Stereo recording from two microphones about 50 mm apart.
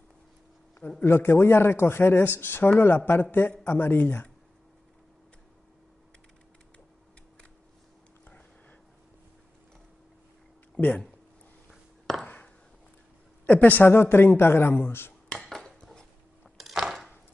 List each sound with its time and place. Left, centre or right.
0.7 s a man's voice: left
1.0 s speech: left
12.1 s ping: centre
13.5 s speech: left
13.8 s speech: left
15.3 s cutlery: centre
16.5 s dishes: centre